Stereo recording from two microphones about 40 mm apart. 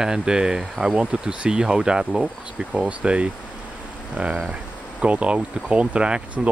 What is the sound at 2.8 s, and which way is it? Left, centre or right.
Speech, right.